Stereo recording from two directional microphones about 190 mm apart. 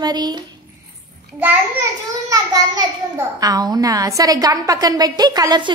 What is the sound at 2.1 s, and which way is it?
A child's voice, 20° right (ahead or behind).